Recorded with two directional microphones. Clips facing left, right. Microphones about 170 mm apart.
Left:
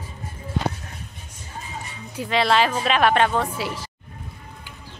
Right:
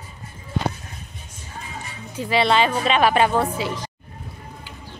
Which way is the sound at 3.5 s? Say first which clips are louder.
Right 2 dB; 5° left (ahead or behind).